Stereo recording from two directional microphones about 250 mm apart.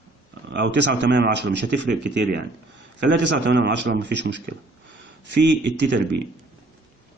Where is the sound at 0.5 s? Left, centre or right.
Right.